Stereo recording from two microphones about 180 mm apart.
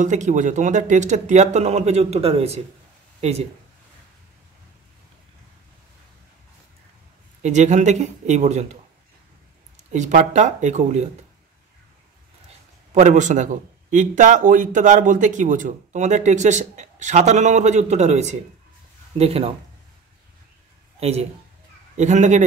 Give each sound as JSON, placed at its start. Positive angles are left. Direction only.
{"t": 0.0, "sound": "speech", "side_deg": -45}
{"t": 7.4, "sound": "speech", "side_deg": -40}
{"t": 9.9, "sound": "speech", "side_deg": -45}
{"t": 12.9, "sound": "a man's voice", "side_deg": -40}
{"t": 21.0, "sound": "speech", "side_deg": -35}